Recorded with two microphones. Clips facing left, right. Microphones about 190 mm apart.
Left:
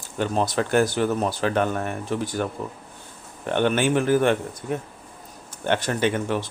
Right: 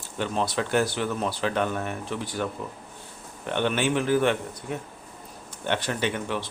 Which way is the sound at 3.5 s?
50° left (ahead or behind).